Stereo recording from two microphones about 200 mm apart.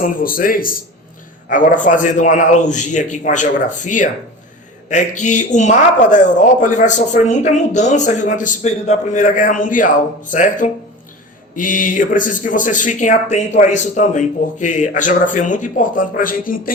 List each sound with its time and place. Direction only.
0.0 s a man's voice: 45° left (ahead or behind)
5.2 s speech: 35° left (ahead or behind)